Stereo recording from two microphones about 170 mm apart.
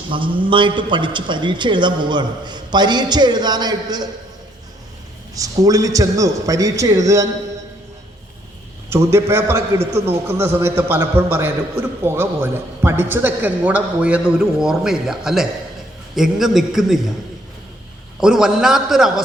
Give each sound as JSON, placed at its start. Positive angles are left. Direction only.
{"t": 0.1, "sound": "a man's voice", "side_deg": -30}
{"t": 5.3, "sound": "a man's voice", "side_deg": -20}
{"t": 8.9, "sound": "a man's voice", "side_deg": -15}
{"t": 18.2, "sound": "a man's voice", "side_deg": -5}